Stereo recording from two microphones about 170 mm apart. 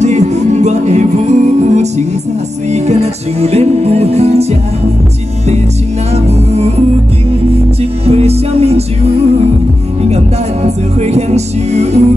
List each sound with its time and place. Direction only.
0.0 s music: 45° right (ahead or behind)
8.0 s music: 35° right (ahead or behind)
10.0 s music: 40° right (ahead or behind)